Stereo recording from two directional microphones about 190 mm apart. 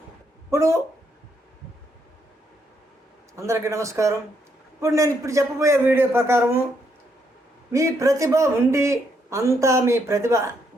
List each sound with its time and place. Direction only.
0.5 s speech: 15° right (ahead or behind)
3.3 s speech: 15° right (ahead or behind)
7.7 s speech: 15° right (ahead or behind)